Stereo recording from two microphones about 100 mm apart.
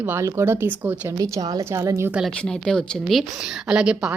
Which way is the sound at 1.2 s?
40° right (ahead or behind).